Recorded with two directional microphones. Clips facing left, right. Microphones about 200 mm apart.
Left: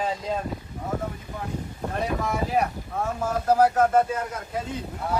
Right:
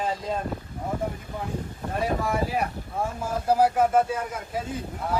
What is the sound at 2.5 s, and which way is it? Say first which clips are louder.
Speech: left 3 dB; 10° right (ahead or behind).